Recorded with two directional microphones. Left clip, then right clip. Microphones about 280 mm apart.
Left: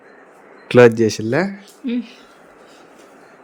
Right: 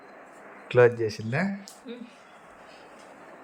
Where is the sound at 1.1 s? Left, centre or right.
Centre.